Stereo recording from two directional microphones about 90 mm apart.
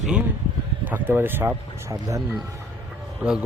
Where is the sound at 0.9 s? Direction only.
20° right (ahead or behind).